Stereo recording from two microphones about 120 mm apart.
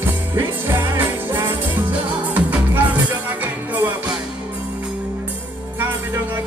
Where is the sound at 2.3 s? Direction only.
15° right (ahead or behind).